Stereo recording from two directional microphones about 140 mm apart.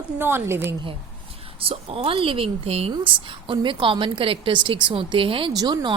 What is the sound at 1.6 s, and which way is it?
A woman's voice, 45° right (ahead or behind).